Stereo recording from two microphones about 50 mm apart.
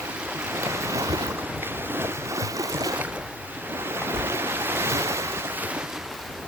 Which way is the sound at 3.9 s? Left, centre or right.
Right.